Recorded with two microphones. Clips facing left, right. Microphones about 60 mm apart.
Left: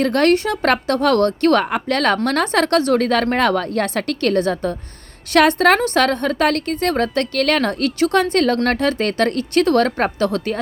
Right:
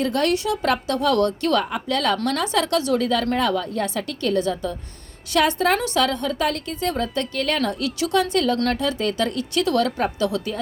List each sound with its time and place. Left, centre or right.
0.0 s a woman's voice: left
5.8 s a woman's voice: left